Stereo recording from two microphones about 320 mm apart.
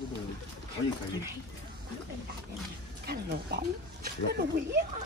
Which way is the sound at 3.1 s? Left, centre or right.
Right.